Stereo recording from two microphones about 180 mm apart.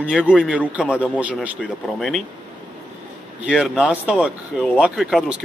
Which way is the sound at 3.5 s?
5° right (ahead or behind).